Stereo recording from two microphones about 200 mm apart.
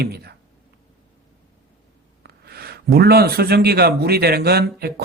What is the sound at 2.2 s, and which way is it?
A man's voice, 50° right (ahead or behind).